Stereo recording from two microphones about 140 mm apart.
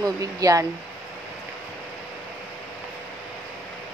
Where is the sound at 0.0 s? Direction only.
25° right (ahead or behind).